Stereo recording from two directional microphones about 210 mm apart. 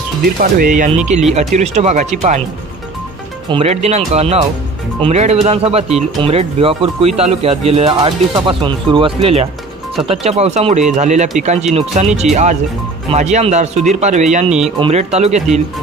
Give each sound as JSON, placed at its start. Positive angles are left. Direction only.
{"t": 0.4, "sound": "speech", "side_deg": -40}
{"t": 3.4, "sound": "speech", "side_deg": -25}